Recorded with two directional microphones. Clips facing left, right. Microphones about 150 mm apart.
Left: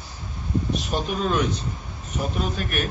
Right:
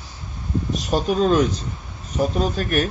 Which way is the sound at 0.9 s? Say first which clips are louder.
Right 11 dB; 35° right (ahead or behind).